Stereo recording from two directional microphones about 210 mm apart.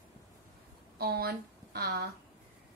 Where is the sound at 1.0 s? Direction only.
45° right (ahead or behind).